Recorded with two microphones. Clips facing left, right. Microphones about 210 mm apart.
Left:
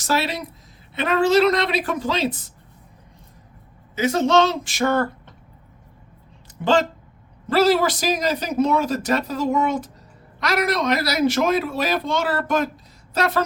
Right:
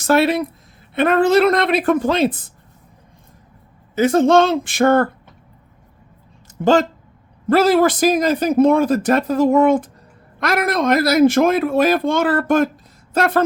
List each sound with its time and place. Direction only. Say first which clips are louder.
0.0 s speech: right 8 dB; 55° right (ahead or behind)
3.9 s speech: right 5 dB; 50° right (ahead or behind)
6.6 s speech: right 4 dB; 45° right (ahead or behind)